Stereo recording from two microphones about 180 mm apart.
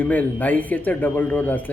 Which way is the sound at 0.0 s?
10° left (ahead or behind).